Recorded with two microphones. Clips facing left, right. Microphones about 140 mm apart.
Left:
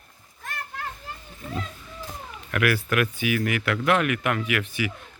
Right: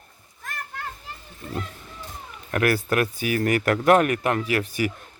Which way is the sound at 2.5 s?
35° right (ahead or behind).